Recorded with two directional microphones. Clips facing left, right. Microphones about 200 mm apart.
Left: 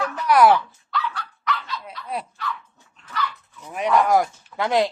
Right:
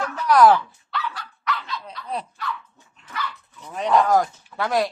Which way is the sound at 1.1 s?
Centre (ahead or behind).